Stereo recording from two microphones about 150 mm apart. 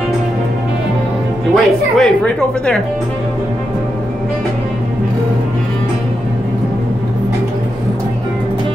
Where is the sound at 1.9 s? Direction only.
5° left (ahead or behind).